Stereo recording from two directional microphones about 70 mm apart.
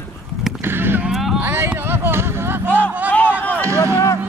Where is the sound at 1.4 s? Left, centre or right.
Right.